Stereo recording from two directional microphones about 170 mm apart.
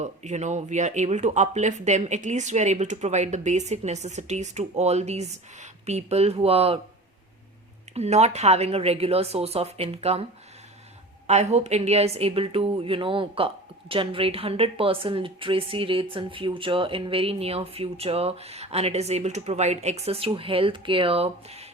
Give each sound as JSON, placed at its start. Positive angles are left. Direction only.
{"t": 0.0, "sound": "a woman's voice", "side_deg": -45}
{"t": 7.9, "sound": "a woman's voice", "side_deg": -40}
{"t": 11.3, "sound": "a woman's voice", "side_deg": -40}